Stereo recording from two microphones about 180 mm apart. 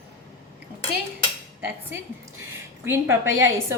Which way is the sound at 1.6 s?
15° right (ahead or behind).